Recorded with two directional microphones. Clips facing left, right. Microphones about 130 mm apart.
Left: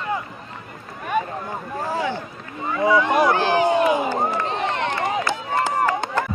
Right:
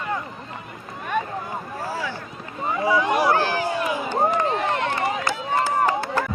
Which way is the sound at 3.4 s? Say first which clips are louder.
Left 5 dB; 20° left (ahead or behind).